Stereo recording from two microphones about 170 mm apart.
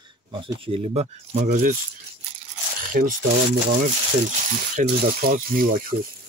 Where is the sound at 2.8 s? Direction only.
55° right (ahead or behind).